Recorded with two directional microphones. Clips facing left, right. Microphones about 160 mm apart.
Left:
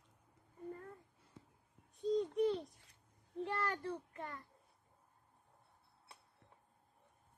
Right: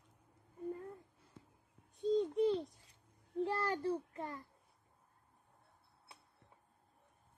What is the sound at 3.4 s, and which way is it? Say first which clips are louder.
A child's voice: right 4 dB; 30° right (ahead or behind).